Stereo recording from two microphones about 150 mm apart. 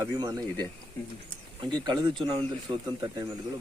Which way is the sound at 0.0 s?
20° right (ahead or behind).